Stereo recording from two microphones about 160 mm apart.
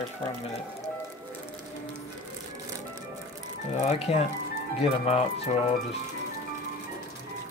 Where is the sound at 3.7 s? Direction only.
45° left (ahead or behind).